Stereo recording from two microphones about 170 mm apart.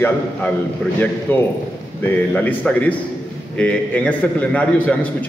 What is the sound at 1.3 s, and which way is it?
A man's voice, 10° left (ahead or behind).